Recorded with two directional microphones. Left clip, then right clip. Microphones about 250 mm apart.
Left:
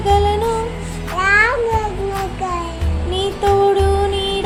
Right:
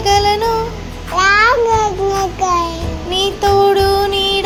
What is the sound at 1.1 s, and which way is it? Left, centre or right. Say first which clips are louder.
Babbling: right 3 dB; right.